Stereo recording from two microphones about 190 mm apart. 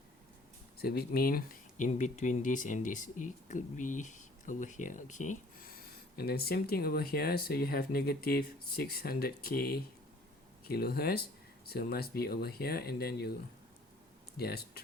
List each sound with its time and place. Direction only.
0.8 s speech: 55° left (ahead or behind)
14.3 s speech: 55° left (ahead or behind)